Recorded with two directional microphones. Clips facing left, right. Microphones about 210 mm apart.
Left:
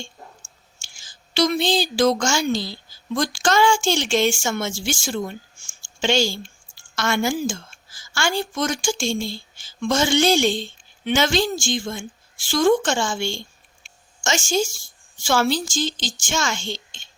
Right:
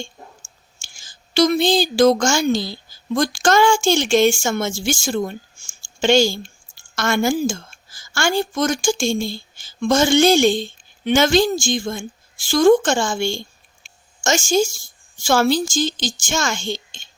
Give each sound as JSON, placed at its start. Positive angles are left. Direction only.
{"t": 0.9, "sound": "a woman's voice", "side_deg": -45}